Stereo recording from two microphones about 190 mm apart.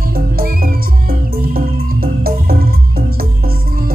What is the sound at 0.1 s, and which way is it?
Music, 50° right (ahead or behind).